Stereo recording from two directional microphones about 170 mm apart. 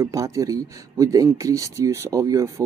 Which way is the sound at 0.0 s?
20° right (ahead or behind).